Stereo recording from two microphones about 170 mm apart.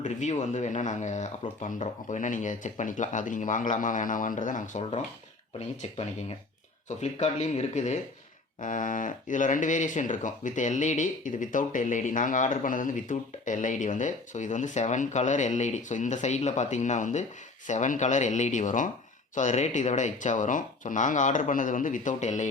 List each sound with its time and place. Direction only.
0.0 s speech: 45° left (ahead or behind)
6.0 s speech: 35° left (ahead or behind)